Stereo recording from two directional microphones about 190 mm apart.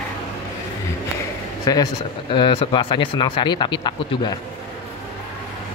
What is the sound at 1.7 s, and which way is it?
Speech, 20° left (ahead or behind).